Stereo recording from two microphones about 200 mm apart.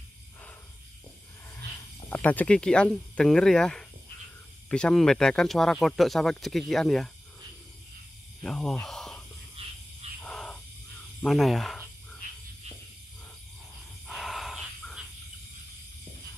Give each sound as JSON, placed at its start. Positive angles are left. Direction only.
{"t": 2.0, "sound": "speech", "side_deg": 10}
{"t": 8.4, "sound": "speech", "side_deg": 5}
{"t": 9.6, "sound": "frog", "side_deg": -30}
{"t": 10.2, "sound": "crow", "side_deg": 5}
{"t": 11.2, "sound": "speech", "side_deg": 0}
{"t": 14.0, "sound": "a sound", "side_deg": 0}